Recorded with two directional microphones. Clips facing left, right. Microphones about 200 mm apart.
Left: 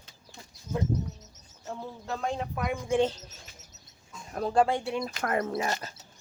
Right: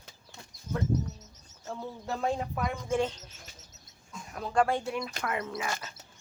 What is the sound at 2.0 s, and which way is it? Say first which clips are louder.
Speech: right 1 dB; 5° right (ahead or behind).